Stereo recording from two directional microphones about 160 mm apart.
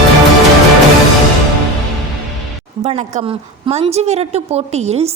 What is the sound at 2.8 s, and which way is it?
A woman's voice, 40° right (ahead or behind).